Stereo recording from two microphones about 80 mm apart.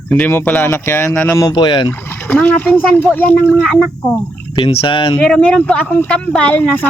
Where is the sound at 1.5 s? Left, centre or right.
Left.